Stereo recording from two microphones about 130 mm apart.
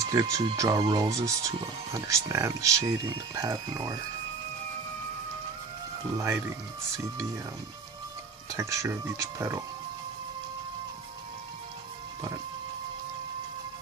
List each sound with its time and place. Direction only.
0.0 s speech: 25° right (ahead or behind)
8.4 s speech: 25° right (ahead or behind)